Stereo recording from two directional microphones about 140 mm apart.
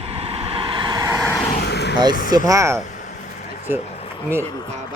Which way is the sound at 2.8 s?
65° left (ahead or behind).